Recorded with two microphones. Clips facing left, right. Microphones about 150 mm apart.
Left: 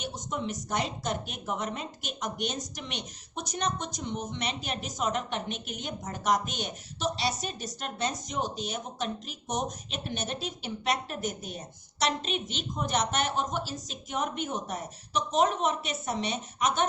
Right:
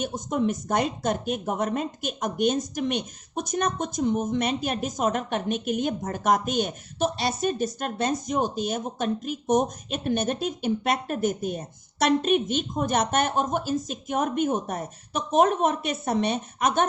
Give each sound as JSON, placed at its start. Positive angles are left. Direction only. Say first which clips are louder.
{"t": 0.0, "sound": "speech", "louder": "right 9 dB", "side_deg": -50}